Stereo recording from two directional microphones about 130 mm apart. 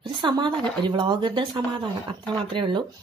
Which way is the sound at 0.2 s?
35° right (ahead or behind).